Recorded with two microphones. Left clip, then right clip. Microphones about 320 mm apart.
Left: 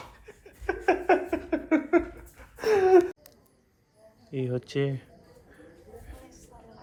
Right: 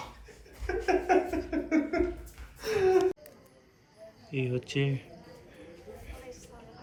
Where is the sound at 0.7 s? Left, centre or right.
Centre.